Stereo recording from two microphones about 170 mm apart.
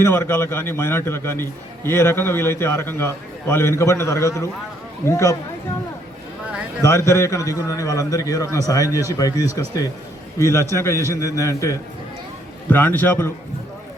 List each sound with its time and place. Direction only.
0.0 s a man's voice: 15° left (ahead or behind)
6.8 s a man's voice: 20° left (ahead or behind)